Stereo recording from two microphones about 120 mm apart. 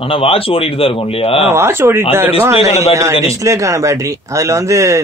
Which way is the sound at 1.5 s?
20° right (ahead or behind).